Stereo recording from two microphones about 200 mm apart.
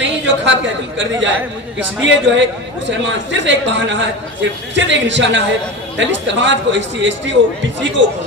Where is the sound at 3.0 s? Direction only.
65° right (ahead or behind).